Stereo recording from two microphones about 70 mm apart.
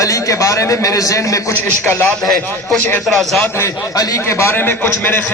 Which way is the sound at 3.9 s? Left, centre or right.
Left.